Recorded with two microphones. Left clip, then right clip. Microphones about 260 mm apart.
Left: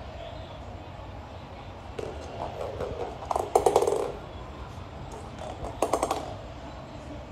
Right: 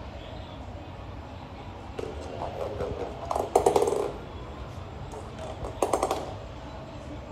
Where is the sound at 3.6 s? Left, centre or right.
Left.